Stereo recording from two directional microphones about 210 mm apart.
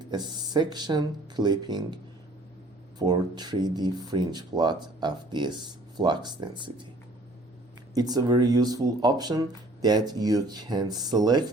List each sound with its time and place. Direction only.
0.0 s speech: 20° right (ahead or behind)
3.0 s speech: 20° right (ahead or behind)
7.9 s speech: 20° right (ahead or behind)